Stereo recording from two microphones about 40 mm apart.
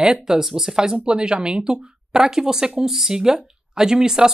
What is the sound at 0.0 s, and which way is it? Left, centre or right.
Speech, centre.